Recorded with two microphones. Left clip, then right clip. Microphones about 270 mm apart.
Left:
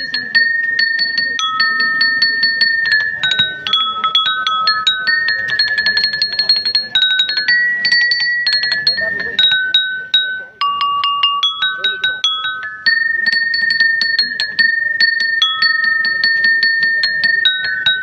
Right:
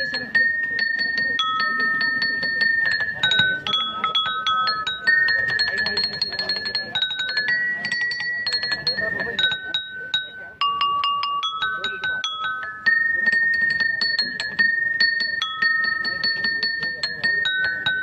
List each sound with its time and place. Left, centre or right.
0.3 s wind chime: centre
9.4 s music: centre
12.8 s music: centre
15.6 s a sound: centre